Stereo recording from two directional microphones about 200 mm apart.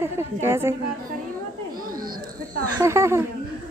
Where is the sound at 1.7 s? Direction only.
45° right (ahead or behind).